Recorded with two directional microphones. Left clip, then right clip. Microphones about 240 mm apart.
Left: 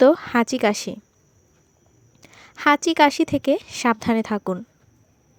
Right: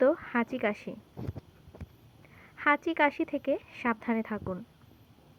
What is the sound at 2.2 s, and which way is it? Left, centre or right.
A woman's voice, left.